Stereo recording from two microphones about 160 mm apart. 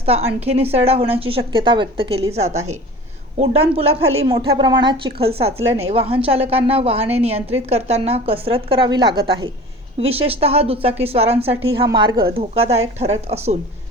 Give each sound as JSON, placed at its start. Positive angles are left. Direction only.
{"t": 0.0, "sound": "a woman's voice", "side_deg": -40}
{"t": 4.3, "sound": "a woman's voice", "side_deg": -25}
{"t": 10.0, "sound": "a woman's voice", "side_deg": -35}
{"t": 12.3, "sound": "a woman's voice", "side_deg": -40}